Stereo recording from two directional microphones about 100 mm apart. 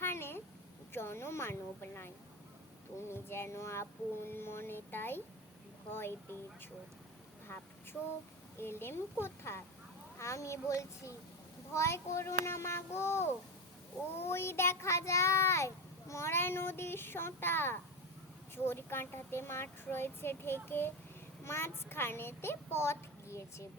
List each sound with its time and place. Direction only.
0.0 s a sound: 25° left (ahead or behind)
0.9 s speech: 25° left (ahead or behind)
7.5 s speech: 20° left (ahead or behind)